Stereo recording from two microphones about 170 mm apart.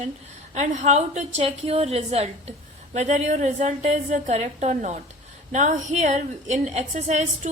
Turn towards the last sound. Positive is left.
turn(degrees=-40)  # may be behind; listen again after turning